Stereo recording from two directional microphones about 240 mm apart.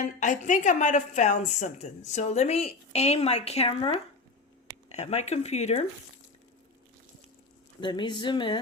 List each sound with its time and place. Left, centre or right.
0.0 s a woman's voice: left
7.8 s a woman's voice: centre